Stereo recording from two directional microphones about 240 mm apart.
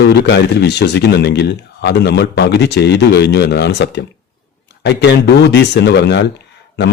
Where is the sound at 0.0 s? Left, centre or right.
Left.